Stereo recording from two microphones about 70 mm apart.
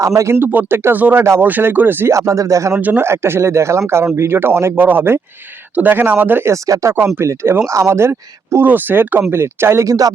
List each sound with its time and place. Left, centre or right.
0.0 s speech: right
0.3 s speech: right
2.1 s speech: right
2.7 s speech: right
3.0 s speech: right
6.4 s speech: right
7.7 s speech: right
8.6 s speech: right
9.8 s speech: right